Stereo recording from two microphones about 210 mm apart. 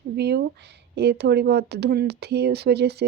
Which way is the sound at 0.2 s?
50° right (ahead or behind).